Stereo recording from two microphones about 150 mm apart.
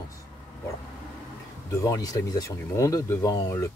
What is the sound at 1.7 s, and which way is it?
Speech, 20° left (ahead or behind).